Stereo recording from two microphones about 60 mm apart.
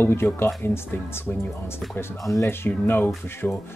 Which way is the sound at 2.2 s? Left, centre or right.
Left.